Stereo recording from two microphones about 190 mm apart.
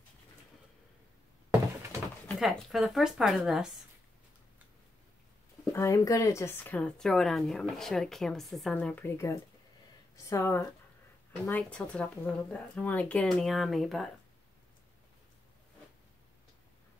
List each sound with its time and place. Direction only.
1.5 s thunk: 15° right (ahead or behind)
2.4 s a woman's voice: centre (ahead or behind)
5.7 s a woman's voice: 15° left (ahead or behind); by 14.1 s centre (ahead or behind)